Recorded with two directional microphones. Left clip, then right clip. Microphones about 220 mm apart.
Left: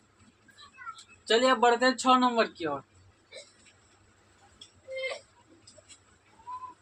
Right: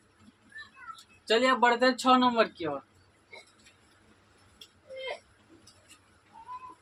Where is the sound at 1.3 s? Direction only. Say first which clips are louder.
Left 1 dB; 15° right (ahead or behind).